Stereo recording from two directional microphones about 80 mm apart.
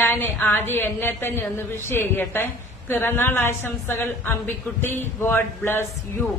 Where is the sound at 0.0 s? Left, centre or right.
Left.